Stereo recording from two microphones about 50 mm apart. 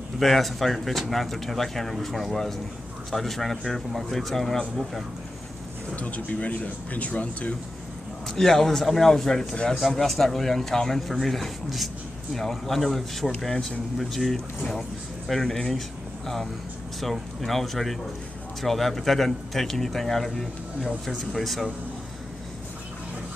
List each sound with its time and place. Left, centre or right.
0.2 s speech: centre
5.9 s speech: left
8.3 s speech: centre
17.0 s speech: centre